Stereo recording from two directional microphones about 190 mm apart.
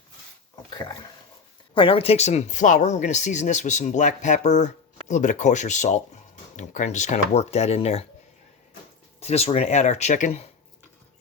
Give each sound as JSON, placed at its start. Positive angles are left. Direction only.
{"t": 0.5, "sound": "speech", "side_deg": 20}
{"t": 9.2, "sound": "speech", "side_deg": 35}